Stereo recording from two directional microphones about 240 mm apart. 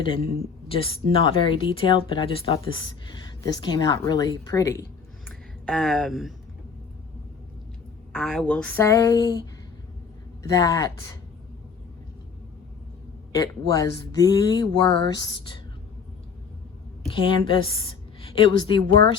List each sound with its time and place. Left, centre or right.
0.7 s speech: left
5.6 s speech: centre
8.1 s speech: centre
10.5 s speech: centre
13.3 s speech: centre
17.1 s a woman's voice: left